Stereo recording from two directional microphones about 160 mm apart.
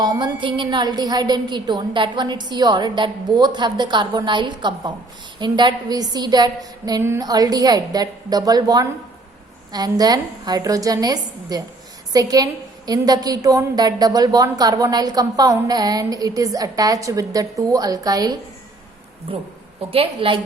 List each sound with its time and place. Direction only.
0.0 s a woman's voice: 25° right (ahead or behind)
19.9 s a woman's voice: 35° right (ahead or behind)